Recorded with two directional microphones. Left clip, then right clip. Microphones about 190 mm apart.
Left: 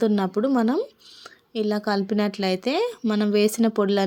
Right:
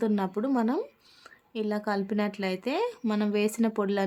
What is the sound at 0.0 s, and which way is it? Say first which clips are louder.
Speech: left 7 dB; 15° left (ahead or behind).